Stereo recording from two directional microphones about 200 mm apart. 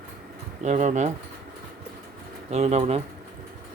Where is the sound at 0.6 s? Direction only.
35° right (ahead or behind).